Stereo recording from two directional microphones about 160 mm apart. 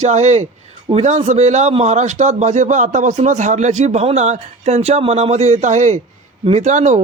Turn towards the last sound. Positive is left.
turn(degrees=-50)  # may be behind; listen again after turning